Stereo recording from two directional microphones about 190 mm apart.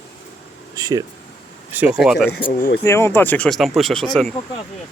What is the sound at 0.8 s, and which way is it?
Speech, 20° right (ahead or behind).